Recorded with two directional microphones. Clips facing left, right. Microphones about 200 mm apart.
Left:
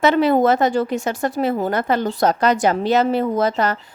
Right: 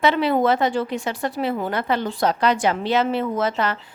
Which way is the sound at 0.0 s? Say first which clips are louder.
Left 4 dB; 45° left (ahead or behind).